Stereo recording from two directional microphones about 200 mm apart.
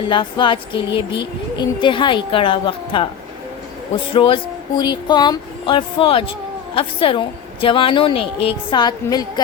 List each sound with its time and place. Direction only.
0.1 s a woman's voice: 25° left (ahead or behind)